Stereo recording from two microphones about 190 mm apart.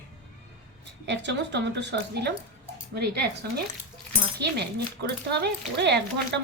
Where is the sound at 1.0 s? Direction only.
65° right (ahead or behind).